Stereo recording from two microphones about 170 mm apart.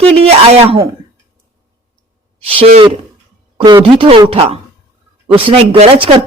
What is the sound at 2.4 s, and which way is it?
A woman's voice, 35° right (ahead or behind).